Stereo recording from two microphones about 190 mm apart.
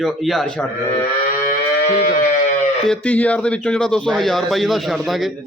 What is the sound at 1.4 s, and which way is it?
Music, 50° left (ahead or behind).